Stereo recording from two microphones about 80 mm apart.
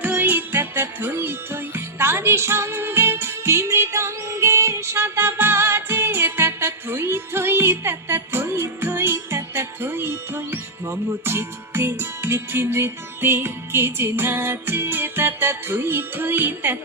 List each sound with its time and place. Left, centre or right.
0.0 s music: right